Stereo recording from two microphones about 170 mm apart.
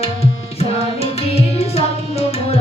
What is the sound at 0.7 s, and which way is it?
Music, 35° left (ahead or behind).